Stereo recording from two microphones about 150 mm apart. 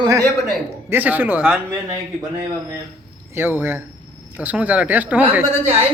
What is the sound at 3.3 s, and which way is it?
A man's voice, 15° right (ahead or behind).